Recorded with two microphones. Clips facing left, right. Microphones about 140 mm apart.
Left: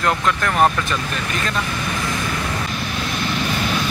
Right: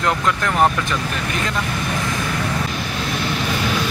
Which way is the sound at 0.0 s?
20° right (ahead or behind).